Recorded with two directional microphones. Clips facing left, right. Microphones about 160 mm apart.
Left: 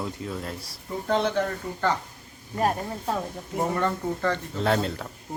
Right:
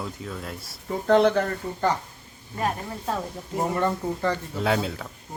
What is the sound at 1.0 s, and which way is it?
Speech, 65° right (ahead or behind).